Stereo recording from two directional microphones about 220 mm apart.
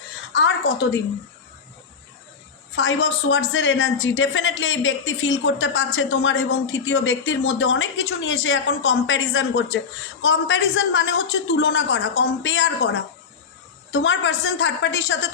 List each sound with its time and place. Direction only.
2.7 s a woman's voice: 60° left (ahead or behind)